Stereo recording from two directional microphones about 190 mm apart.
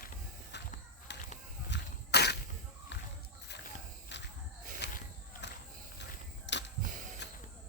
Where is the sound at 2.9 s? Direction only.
65° left (ahead or behind).